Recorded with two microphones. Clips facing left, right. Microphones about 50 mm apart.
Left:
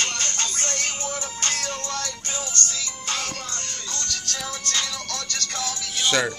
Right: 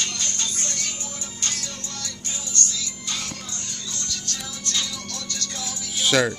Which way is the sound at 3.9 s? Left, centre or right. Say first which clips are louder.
Left 3 dB; left.